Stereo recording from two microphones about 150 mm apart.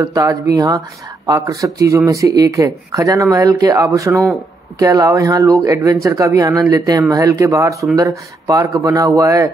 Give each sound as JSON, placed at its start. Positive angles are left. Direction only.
{"t": 0.0, "sound": "speech", "side_deg": -25}